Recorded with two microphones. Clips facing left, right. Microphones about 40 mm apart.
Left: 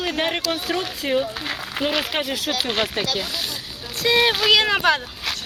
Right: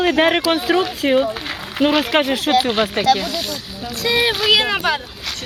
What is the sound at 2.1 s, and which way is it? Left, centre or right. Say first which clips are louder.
Speech: right 7 dB; right.